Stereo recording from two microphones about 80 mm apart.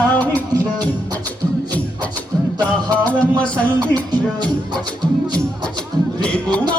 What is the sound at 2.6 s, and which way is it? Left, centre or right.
Music, centre.